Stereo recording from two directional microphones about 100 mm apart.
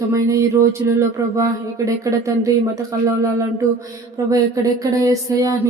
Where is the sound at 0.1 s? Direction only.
30° right (ahead or behind).